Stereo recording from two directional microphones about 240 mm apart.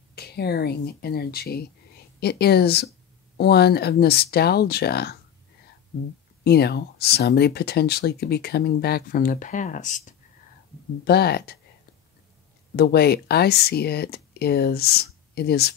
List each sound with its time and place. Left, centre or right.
0.1 s speech: left
6.4 s speech: left
12.7 s speech: left